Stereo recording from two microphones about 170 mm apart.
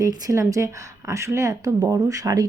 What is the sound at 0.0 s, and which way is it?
A woman's voice, 20° right (ahead or behind).